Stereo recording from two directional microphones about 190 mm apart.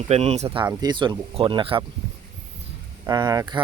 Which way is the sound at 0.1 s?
35° right (ahead or behind).